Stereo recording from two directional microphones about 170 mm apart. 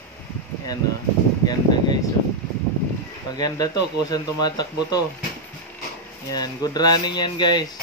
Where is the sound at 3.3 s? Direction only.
20° left (ahead or behind).